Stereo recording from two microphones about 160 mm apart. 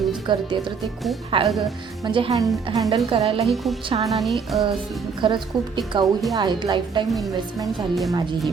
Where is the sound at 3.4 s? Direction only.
Centre (ahead or behind).